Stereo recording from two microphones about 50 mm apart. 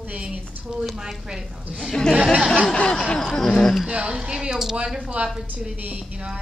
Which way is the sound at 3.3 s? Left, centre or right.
Centre.